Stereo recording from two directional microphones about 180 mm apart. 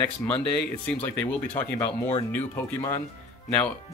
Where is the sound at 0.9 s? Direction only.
10° left (ahead or behind).